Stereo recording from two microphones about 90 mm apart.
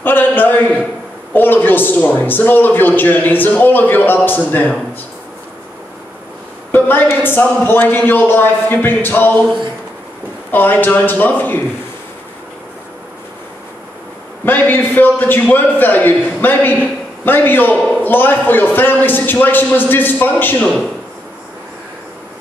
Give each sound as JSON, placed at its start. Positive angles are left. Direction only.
{"t": 0.0, "sound": "a man's voice", "side_deg": 20}
{"t": 6.7, "sound": "a woman's voice", "side_deg": 25}
{"t": 10.5, "sound": "a woman's voice", "side_deg": 20}
{"t": 14.4, "sound": "a woman's voice", "side_deg": 20}